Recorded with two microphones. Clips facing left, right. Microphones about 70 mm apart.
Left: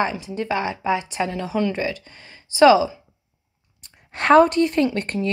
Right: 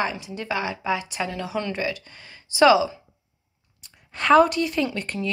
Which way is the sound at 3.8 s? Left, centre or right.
Left.